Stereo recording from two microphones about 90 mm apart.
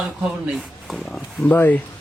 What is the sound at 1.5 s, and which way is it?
Speech, 20° left (ahead or behind).